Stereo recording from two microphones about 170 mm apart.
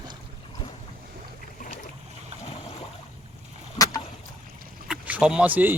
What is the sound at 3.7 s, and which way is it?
Boat, 20° left (ahead or behind).